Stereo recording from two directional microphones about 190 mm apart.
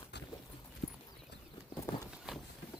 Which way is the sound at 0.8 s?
60° left (ahead or behind).